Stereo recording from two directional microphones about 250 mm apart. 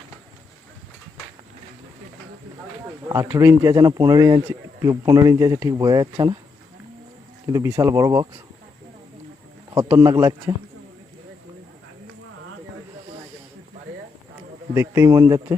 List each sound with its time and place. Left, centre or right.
3.1 s speech: centre
7.4 s speech: centre
9.7 s speech: centre
14.7 s speech: centre